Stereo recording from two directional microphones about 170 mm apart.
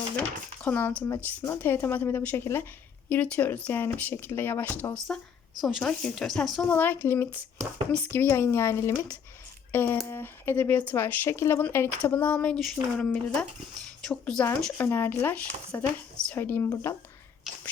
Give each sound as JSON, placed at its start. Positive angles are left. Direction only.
{"t": 0.6, "sound": "a woman's voice", "side_deg": 10}
{"t": 16.6, "sound": "speech", "side_deg": 25}